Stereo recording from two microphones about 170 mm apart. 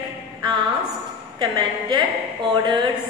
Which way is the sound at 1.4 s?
25° right (ahead or behind).